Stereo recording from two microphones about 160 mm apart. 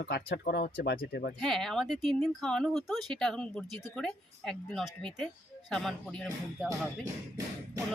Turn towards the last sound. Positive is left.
turn(degrees=-20)  # may be behind; listen again after turning